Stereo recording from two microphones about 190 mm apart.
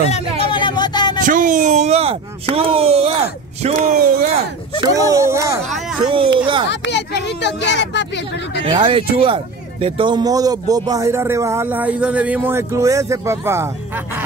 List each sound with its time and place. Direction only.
0.1 s a sound: 30° left (ahead or behind)
1.2 s a sound: 45° right (ahead or behind)
4.8 s speech: 15° right (ahead or behind)
6.0 s speech: 25° right (ahead or behind)
6.7 s speech: 65° left (ahead or behind)
8.6 s speech: 30° right (ahead or behind); by 13.7 s 15° right (ahead or behind)